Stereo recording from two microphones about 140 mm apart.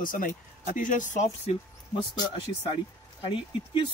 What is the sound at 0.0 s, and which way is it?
Speech, 70° left (ahead or behind).